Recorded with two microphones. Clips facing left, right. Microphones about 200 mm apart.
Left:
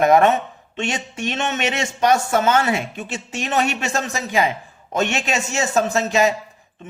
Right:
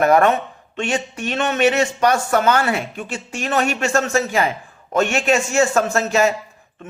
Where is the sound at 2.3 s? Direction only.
25° left (ahead or behind).